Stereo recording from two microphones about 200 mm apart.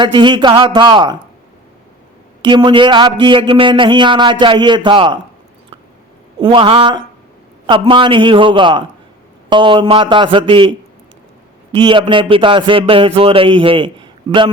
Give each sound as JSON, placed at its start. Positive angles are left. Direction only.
{"t": 0.0, "sound": "a man's voice", "side_deg": -25}
{"t": 2.4, "sound": "a man's voice", "side_deg": -25}
{"t": 6.4, "sound": "a man's voice", "side_deg": -25}
{"t": 11.8, "sound": "a man's voice", "side_deg": -25}